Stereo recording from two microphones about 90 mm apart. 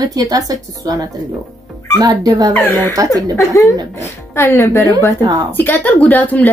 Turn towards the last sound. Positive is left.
turn(degrees=20)  # may be behind; listen again after turning